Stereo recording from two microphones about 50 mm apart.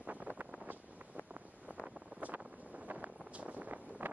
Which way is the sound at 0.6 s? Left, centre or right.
Right.